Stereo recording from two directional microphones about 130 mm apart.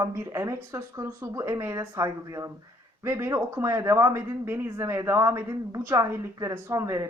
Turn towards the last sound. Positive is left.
turn(degrees=-25)  # may be behind; listen again after turning